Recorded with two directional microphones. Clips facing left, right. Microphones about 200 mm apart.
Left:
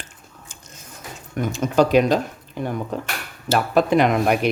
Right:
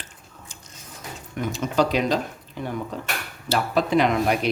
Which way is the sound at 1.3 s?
45° left (ahead or behind).